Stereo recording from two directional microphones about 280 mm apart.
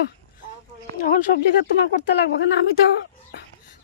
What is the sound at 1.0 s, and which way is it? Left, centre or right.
Speech, left.